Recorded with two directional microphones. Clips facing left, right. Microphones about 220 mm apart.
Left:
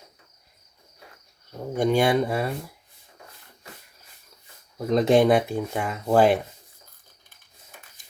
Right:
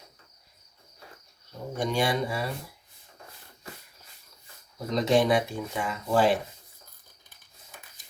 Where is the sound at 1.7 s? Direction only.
55° left (ahead or behind).